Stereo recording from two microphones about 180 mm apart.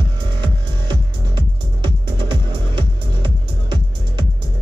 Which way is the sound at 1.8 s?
25° right (ahead or behind).